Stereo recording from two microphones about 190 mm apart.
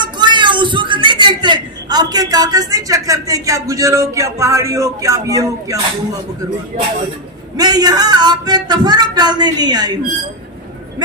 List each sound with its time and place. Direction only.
0.0 s speech: 25° right (ahead or behind)
6.7 s speech: 40° right (ahead or behind)
7.5 s speech: 20° right (ahead or behind)